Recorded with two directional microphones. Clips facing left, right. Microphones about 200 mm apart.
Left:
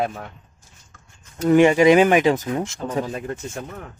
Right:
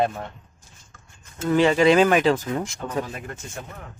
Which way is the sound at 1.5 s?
15° left (ahead or behind).